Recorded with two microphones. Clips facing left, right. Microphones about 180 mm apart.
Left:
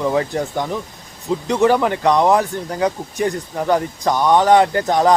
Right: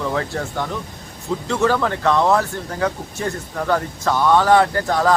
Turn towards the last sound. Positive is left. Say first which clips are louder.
# left 3 dB
turn(degrees=20)  # may be behind; listen again after turning